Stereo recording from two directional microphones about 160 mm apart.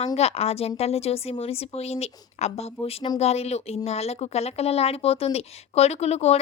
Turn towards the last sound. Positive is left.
turn(degrees=40)  # may be behind; listen again after turning